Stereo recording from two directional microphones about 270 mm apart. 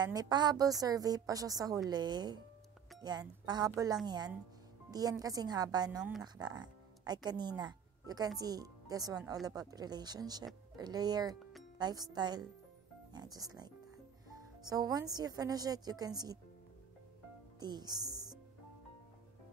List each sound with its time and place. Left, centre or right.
0.0 s a woman's voice: centre
17.6 s speech: centre